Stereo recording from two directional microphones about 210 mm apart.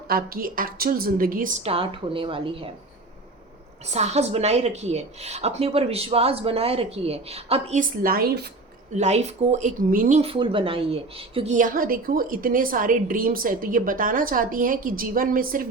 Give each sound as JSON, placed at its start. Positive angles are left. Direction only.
{"t": 0.1, "sound": "speech", "side_deg": -45}
{"t": 3.9, "sound": "a woman's voice", "side_deg": -30}
{"t": 9.0, "sound": "speech", "side_deg": -30}